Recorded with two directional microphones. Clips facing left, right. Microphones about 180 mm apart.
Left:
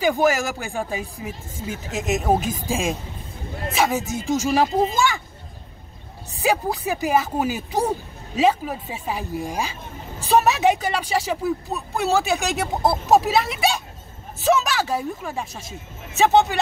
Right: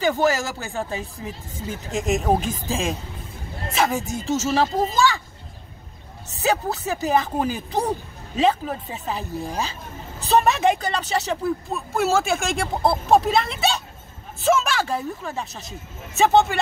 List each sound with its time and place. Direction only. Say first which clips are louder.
0.0 s speech: left 1 dB; 15° left (ahead or behind)
6.4 s speech: left 1 dB; 15° left (ahead or behind)